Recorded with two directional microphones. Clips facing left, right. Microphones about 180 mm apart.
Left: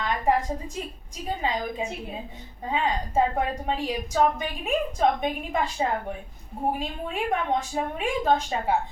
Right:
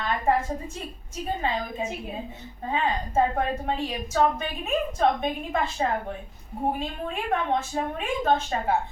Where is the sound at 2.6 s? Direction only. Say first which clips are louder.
Even; 15° left (ahead or behind).